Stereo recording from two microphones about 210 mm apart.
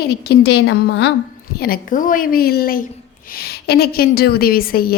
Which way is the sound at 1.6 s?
45° left (ahead or behind).